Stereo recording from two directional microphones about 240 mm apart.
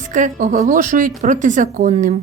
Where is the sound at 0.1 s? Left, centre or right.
Right.